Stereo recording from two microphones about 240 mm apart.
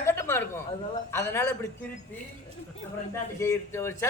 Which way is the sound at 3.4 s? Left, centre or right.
Centre.